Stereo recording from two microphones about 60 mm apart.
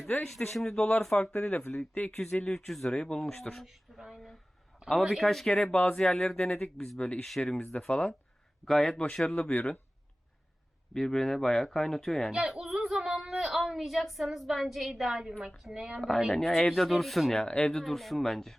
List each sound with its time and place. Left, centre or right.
0.3 s speech: centre
1.3 s speech: left
2.4 s a woman's voice: centre
3.9 s a sound: centre
4.9 s a woman's voice: centre
8.6 s speech: centre
9.2 s speech: left
10.9 s speech: centre
12.3 s a sound: centre
13.7 s a woman's voice: centre
16.0 s a woman's voice: centre
17.3 s a woman's voice: centre